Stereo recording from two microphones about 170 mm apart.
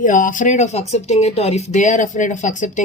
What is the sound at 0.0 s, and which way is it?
Speech, 50° left (ahead or behind).